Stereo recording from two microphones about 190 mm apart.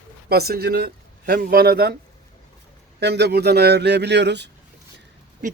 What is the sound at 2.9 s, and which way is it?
A man's voice, 65° right (ahead or behind).